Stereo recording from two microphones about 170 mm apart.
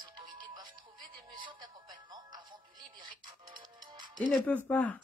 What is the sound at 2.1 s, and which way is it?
Music, 25° right (ahead or behind).